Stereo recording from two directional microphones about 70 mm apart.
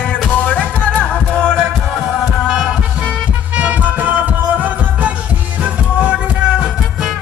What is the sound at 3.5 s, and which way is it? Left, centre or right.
Music, right.